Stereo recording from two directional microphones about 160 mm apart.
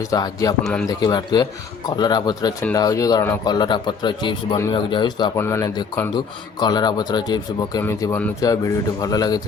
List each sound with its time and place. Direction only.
0.1 s a man's voice: 20° left (ahead or behind)
0.6 s speech: 5° left (ahead or behind)
0.9 s a man's voice: 25° left (ahead or behind)
5.4 s a man's voice: 15° left (ahead or behind)